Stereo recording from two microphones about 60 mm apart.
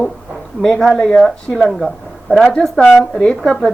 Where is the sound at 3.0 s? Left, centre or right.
Centre.